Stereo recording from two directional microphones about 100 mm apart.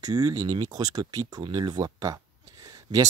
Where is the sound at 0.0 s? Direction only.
35° right (ahead or behind).